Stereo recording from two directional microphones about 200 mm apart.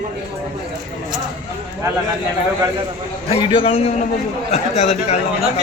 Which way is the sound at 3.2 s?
30° left (ahead or behind).